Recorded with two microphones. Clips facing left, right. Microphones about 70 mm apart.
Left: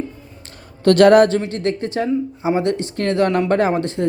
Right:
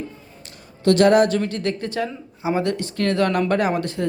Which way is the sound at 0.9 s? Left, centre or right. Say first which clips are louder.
Left 4 dB; left.